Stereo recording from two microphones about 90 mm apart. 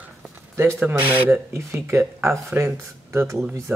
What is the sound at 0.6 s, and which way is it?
Speech, 25° right (ahead or behind).